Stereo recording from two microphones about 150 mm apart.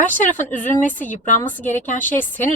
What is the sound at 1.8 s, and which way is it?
Speech, 60° left (ahead or behind).